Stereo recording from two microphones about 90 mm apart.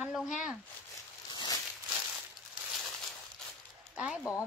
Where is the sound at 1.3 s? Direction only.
55° left (ahead or behind).